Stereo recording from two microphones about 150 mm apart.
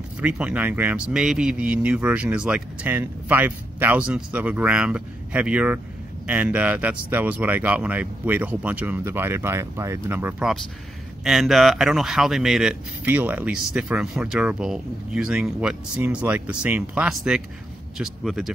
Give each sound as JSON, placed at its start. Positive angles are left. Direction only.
{"t": 0.2, "sound": "speech", "side_deg": -10}
{"t": 11.2, "sound": "speech", "side_deg": 0}